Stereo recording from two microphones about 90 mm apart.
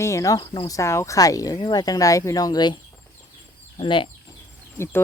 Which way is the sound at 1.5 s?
55° left (ahead or behind).